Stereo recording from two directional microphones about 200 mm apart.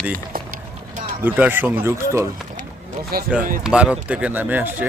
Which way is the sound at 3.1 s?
50° right (ahead or behind).